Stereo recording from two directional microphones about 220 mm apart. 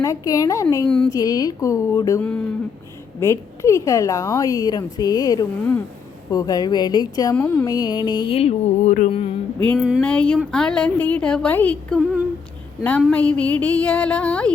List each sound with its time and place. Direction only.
0.0 s speech: 15° left (ahead or behind)
0.9 s a woman's voice: 5° left (ahead or behind)
1.1 s speech: 15° left (ahead or behind)
7.3 s speech: 5° left (ahead or behind)
7.7 s music: 20° left (ahead or behind)
9.6 s a woman's voice: 5° left (ahead or behind)